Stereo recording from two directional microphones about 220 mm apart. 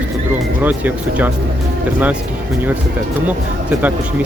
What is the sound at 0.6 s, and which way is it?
Speech, 5° right (ahead or behind).